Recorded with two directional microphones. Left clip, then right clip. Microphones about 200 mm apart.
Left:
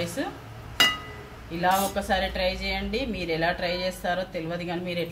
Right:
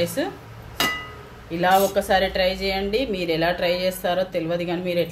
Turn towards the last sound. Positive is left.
turn(degrees=-35)  # may be behind; listen again after turning